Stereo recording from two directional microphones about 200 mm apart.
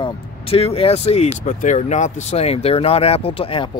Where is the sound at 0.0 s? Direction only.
30° left (ahead or behind).